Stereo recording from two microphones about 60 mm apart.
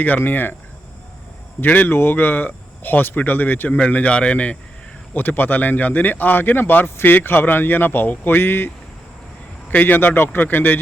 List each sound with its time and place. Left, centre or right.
0.0 s speech: left
1.6 s a man's voice: left
5.1 s speech: left